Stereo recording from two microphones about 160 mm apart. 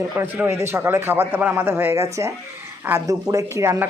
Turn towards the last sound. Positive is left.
turn(degrees=-15)  # may be behind; listen again after turning